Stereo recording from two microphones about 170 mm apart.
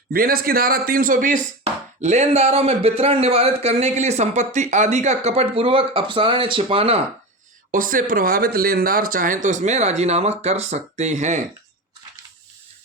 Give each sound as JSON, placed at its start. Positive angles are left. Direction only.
{"t": 0.1, "sound": "speech", "side_deg": -60}
{"t": 7.7, "sound": "speech", "side_deg": -55}